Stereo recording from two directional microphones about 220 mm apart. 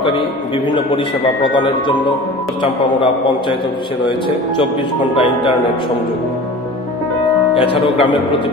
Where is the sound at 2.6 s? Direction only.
25° left (ahead or behind).